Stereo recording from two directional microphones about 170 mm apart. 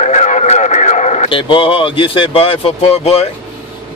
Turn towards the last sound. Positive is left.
turn(degrees=35)  # may be behind; listen again after turning